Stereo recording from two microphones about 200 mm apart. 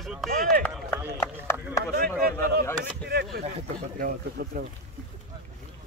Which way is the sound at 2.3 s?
15° left (ahead or behind).